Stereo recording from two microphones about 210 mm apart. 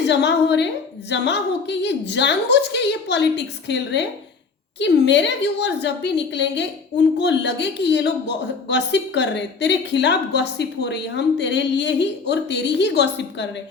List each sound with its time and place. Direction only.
0.0 s a woman's voice: 55° left (ahead or behind)